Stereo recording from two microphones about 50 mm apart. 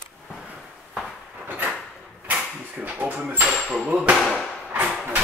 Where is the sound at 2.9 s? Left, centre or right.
Right.